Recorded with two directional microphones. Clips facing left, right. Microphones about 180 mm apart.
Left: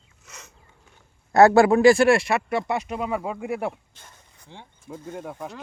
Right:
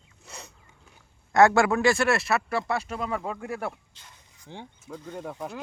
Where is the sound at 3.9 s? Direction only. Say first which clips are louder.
Left 3 dB; 55° left (ahead or behind).